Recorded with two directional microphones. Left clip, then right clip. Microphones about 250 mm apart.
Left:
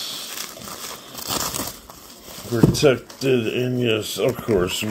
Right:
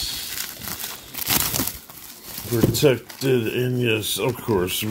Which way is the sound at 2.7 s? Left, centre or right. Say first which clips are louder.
Even; right.